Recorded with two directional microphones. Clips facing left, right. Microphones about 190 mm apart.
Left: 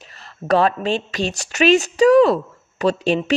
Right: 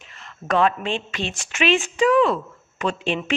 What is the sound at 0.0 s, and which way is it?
Speech, 35° left (ahead or behind).